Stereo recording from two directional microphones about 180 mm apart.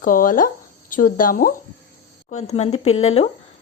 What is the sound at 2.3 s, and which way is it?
Speech, 35° left (ahead or behind).